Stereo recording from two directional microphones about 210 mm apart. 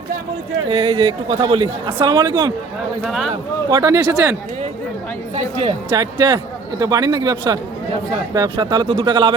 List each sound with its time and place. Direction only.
0.7 s speech: 25° right (ahead or behind)
3.0 s speech: centre (ahead or behind)
3.7 s a man's voice: 20° right (ahead or behind)
5.3 s a man's voice: 30° right (ahead or behind)